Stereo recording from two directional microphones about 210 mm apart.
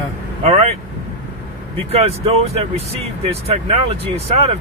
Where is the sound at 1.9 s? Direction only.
30° right (ahead or behind).